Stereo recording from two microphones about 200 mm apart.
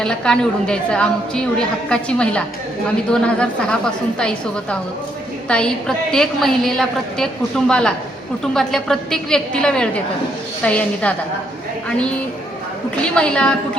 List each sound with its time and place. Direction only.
0.0 s a woman's voice: 5° left (ahead or behind)
13.0 s a woman's voice: 5° left (ahead or behind)